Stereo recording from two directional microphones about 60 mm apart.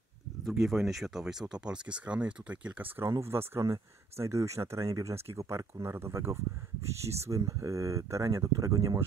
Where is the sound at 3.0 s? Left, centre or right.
Right.